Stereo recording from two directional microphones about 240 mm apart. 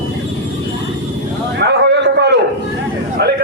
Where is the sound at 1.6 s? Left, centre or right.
Right.